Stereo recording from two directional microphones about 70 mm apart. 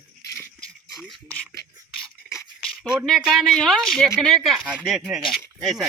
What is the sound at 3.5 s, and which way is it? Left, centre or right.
Speech, centre.